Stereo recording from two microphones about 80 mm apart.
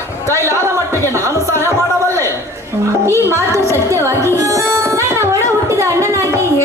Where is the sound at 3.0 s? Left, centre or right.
Right.